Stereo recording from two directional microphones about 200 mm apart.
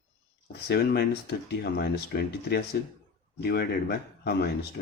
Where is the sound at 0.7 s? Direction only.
55° left (ahead or behind).